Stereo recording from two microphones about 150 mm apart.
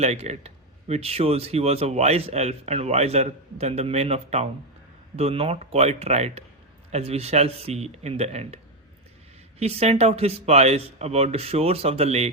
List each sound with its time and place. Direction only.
0.0 s speech: 45° right (ahead or behind)
9.6 s speech: 45° right (ahead or behind)